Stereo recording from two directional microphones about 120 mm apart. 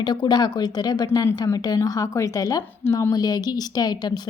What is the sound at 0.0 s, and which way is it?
A woman's voice, 35° left (ahead or behind).